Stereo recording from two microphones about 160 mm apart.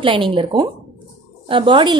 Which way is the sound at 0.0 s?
30° right (ahead or behind).